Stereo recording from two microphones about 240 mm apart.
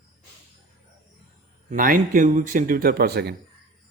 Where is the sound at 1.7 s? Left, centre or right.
Right.